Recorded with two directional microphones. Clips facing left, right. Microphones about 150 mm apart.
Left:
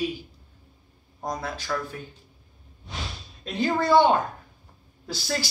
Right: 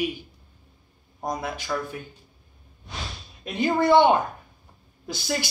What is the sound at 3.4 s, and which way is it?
Speech, 15° right (ahead or behind).